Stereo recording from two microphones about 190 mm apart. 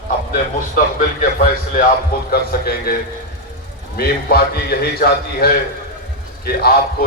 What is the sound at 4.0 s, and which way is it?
A man's voice, 55° left (ahead or behind).